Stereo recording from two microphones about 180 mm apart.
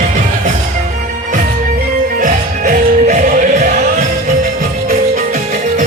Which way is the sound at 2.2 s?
45° right (ahead or behind).